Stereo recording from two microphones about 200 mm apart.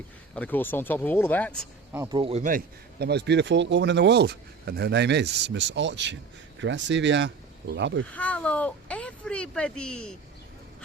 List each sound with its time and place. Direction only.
0.3 s speech: 10° left (ahead or behind)
1.9 s speech: 15° right (ahead or behind)
2.4 s speech: 45° right (ahead or behind); by 8.0 s 65° right (ahead or behind)
8.1 s speech: 5° left (ahead or behind)